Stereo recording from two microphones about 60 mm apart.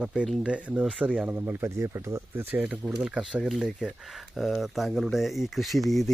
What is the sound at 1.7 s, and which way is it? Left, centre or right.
Speech, right.